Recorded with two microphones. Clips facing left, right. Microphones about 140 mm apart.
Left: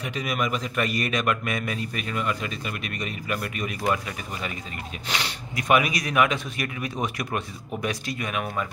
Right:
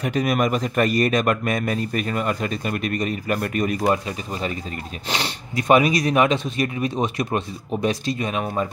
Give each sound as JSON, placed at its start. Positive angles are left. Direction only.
{"t": 0.0, "sound": "a man's voice", "side_deg": -45}